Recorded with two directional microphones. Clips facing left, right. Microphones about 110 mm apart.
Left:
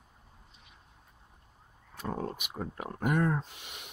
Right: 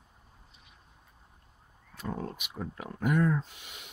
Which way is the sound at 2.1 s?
35° left (ahead or behind).